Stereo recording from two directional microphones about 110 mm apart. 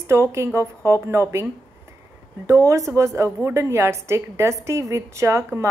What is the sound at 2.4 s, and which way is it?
A woman's voice, 25° right (ahead or behind).